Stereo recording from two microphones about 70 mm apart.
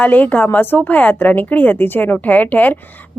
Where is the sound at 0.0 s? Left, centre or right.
Left.